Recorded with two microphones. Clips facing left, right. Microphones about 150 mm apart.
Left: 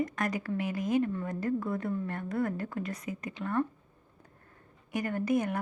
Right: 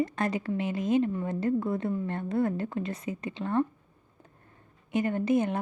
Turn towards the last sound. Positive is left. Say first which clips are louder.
# right 3 dB
turn(degrees=-25)  # may be behind; listen again after turning